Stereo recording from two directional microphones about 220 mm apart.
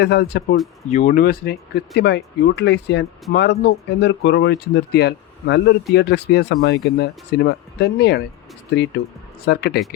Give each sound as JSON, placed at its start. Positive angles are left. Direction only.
{"t": 0.0, "sound": "speech", "side_deg": 50}
{"t": 0.9, "sound": "speech", "side_deg": 35}